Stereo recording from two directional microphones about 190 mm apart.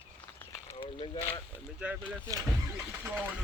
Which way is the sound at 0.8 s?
30° left (ahead or behind).